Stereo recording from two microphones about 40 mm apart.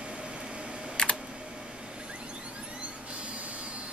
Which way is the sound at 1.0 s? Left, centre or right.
Left.